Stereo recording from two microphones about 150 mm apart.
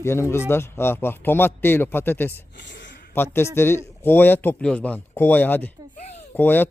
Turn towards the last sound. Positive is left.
turn(degrees=10)  # may be behind; listen again after turning